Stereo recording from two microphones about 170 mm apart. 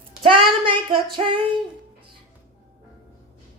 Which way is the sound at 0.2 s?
30° right (ahead or behind).